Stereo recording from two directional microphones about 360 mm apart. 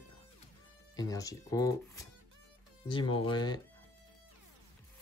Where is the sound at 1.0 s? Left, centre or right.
Centre.